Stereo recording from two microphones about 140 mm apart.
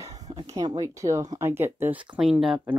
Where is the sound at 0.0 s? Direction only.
25° right (ahead or behind).